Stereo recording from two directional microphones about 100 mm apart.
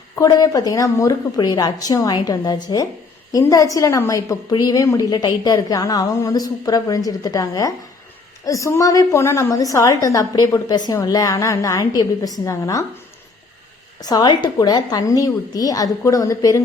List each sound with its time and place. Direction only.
0.2 s a woman's voice: 40° left (ahead or behind)
14.0 s a woman's voice: 40° left (ahead or behind)